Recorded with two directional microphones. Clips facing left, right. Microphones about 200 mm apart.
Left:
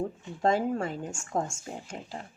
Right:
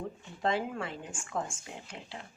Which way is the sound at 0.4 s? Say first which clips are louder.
Left 6 dB; 45° left (ahead or behind).